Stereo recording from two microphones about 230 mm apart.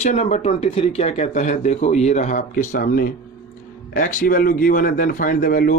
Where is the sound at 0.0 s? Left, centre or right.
Left.